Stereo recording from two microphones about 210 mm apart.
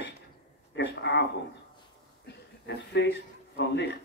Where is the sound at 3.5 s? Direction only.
55° left (ahead or behind).